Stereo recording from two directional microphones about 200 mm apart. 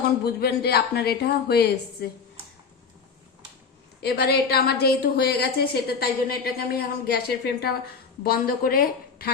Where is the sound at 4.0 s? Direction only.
55° left (ahead or behind).